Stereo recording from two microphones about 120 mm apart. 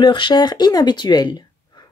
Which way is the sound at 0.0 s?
40° left (ahead or behind).